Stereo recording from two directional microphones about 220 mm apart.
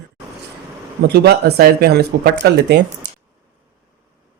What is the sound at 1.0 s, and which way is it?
Speech, 45° right (ahead or behind).